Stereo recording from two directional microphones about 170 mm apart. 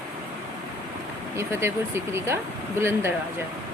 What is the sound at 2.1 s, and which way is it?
Speech, 15° right (ahead or behind).